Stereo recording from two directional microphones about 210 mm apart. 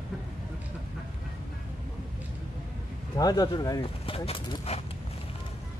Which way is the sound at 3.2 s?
20° left (ahead or behind).